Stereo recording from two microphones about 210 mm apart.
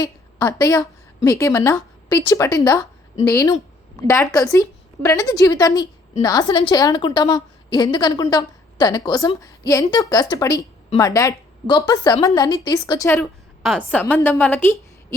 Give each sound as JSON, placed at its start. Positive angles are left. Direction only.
{"t": 0.0, "sound": "a woman's voice", "side_deg": 15}
{"t": 13.1, "sound": "a woman's voice", "side_deg": 0}